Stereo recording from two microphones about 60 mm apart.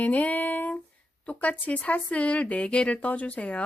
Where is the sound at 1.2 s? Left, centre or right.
Left.